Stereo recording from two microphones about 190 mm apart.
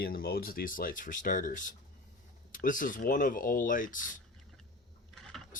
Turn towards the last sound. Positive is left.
turn(degrees=0)  # may be behind; listen again after turning